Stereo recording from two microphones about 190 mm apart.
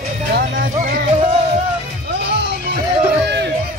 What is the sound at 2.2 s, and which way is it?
Music, 60° right (ahead or behind).